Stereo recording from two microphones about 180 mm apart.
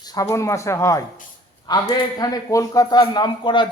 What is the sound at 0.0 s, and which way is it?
A man's voice, 20° left (ahead or behind).